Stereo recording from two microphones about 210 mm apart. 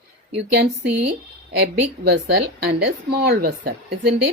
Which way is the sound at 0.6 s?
45° right (ahead or behind).